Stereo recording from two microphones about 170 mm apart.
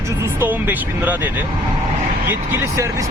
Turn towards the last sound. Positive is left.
turn(degrees=-15)  # may be behind; listen again after turning